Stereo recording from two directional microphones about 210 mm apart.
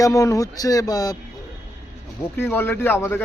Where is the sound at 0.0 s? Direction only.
15° left (ahead or behind).